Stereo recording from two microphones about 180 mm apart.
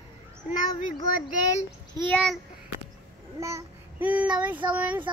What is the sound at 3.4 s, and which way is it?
A child's voice, 15° right (ahead or behind).